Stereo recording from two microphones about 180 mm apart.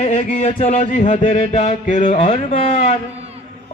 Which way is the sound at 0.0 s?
40° left (ahead or behind).